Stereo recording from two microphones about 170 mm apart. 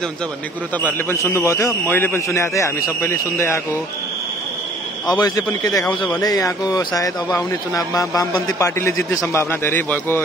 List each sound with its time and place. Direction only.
0.7 s a man's voice: 10° left (ahead or behind)
5.0 s speech: 20° left (ahead or behind)